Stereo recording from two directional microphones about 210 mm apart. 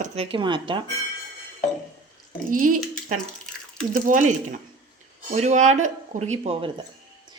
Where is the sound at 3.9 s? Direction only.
40° right (ahead or behind).